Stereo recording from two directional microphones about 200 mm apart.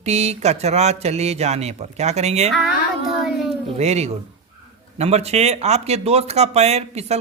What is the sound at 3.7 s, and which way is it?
Speech, 35° right (ahead or behind).